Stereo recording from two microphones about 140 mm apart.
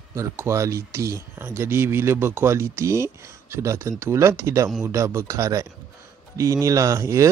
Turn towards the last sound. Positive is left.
turn(degrees=-20)  # may be behind; listen again after turning